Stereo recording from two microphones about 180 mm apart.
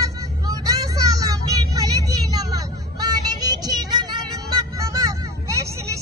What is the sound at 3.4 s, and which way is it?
Music, 20° right (ahead or behind).